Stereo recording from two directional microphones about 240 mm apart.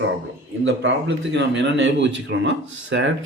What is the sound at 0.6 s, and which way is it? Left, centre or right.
A man's voice, right.